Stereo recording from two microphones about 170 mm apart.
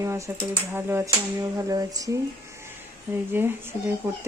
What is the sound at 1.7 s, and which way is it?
Speech, 20° right (ahead or behind).